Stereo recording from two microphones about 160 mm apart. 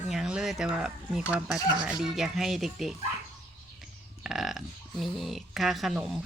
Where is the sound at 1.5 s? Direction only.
20° left (ahead or behind).